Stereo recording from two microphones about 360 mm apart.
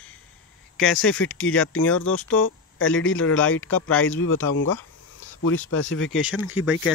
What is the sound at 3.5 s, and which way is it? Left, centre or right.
Speech, left.